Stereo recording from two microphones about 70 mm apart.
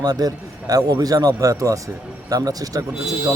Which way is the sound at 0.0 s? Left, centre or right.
Right.